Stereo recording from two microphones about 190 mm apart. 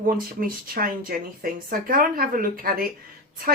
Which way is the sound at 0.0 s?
50° right (ahead or behind).